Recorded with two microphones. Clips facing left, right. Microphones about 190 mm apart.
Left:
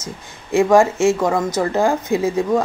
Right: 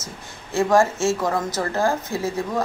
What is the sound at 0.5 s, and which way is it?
Speech, 15° left (ahead or behind).